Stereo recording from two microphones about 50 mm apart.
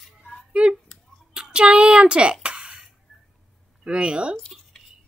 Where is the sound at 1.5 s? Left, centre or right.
Right.